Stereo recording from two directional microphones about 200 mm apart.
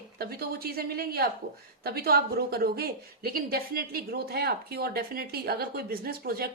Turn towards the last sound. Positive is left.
turn(degrees=-50)  # may be behind; listen again after turning